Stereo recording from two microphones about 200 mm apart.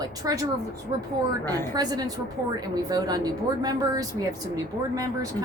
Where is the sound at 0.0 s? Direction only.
15° right (ahead or behind).